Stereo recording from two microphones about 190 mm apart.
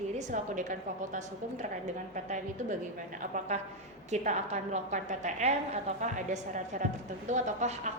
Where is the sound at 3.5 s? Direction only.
35° right (ahead or behind).